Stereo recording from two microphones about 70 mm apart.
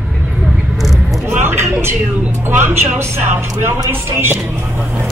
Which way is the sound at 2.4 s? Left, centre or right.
Right.